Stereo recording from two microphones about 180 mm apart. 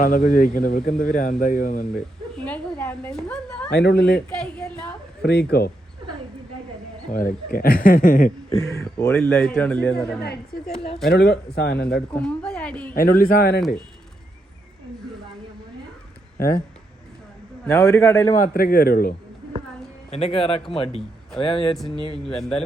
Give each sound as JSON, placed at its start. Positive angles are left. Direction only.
{"t": 0.0, "sound": "speech", "side_deg": 45}
{"t": 2.4, "sound": "a sound", "side_deg": 10}
{"t": 3.7, "sound": "speech", "side_deg": 70}
{"t": 4.4, "sound": "a sound", "side_deg": 5}
{"t": 5.2, "sound": "speech", "side_deg": 65}
{"t": 7.1, "sound": "speech", "side_deg": 50}
{"t": 8.4, "sound": "speech", "side_deg": 15}
{"t": 11.1, "sound": "speech", "side_deg": 60}
{"t": 12.1, "sound": "speech", "side_deg": 5}
{"t": 12.9, "sound": "speech", "side_deg": 55}
{"t": 17.7, "sound": "speech", "side_deg": 15}
{"t": 18.3, "sound": "speech", "side_deg": 50}
{"t": 20.1, "sound": "speech", "side_deg": 35}
{"t": 22.2, "sound": "speech", "side_deg": 5}